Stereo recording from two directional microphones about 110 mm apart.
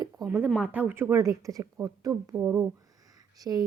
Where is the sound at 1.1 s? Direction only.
30° right (ahead or behind).